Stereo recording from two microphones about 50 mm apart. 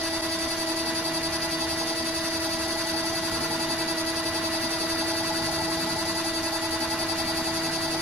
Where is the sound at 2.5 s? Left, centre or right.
Centre.